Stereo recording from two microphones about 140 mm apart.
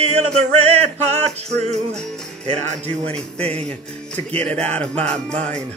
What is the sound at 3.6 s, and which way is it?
Speech, 10° left (ahead or behind).